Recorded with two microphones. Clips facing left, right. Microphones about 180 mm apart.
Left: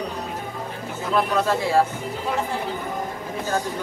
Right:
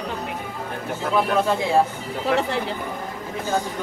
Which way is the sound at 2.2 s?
75° right (ahead or behind).